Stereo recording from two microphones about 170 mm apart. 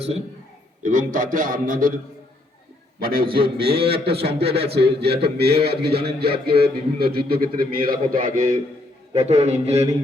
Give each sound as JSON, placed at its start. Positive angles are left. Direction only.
{"t": 0.8, "sound": "a man's voice", "side_deg": -50}
{"t": 3.0, "sound": "a man's voice", "side_deg": -60}
{"t": 9.1, "sound": "a man's voice", "side_deg": -40}